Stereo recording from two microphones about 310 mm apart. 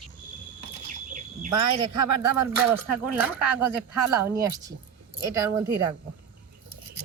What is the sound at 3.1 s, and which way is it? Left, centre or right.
Speech, centre.